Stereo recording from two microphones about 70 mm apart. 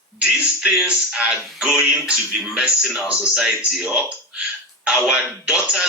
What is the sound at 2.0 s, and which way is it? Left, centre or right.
Speech, centre.